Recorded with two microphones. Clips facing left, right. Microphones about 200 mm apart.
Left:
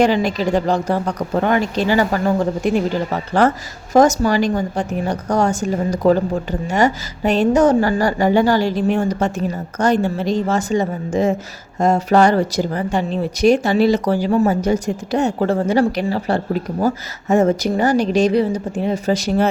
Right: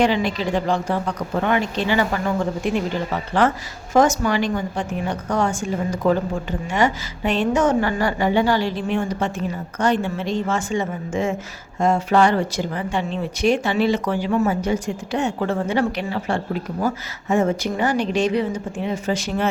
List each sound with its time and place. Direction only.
0.0 s speech: 40° left (ahead or behind)